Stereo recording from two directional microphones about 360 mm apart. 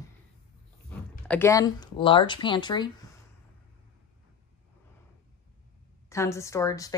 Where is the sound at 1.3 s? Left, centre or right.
Centre.